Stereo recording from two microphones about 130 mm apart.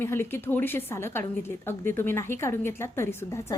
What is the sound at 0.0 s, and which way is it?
A woman's voice, 20° left (ahead or behind).